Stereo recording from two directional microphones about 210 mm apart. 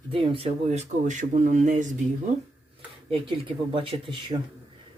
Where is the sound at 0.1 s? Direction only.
25° right (ahead or behind).